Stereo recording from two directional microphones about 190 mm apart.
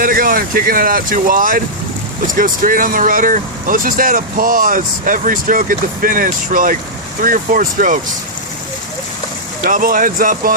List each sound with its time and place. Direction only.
0.0 s speech: 50° right (ahead or behind)
9.6 s speech: 45° right (ahead or behind)